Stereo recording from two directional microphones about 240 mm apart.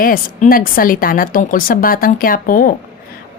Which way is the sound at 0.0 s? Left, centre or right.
Left.